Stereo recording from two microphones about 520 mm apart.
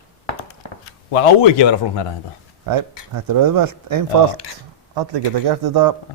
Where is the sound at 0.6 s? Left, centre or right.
Left.